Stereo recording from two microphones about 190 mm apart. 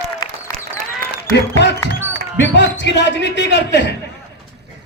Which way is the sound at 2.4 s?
70° left (ahead or behind).